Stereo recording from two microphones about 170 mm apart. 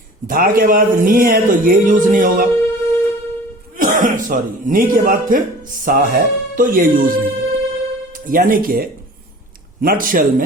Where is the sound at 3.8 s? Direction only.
50° right (ahead or behind).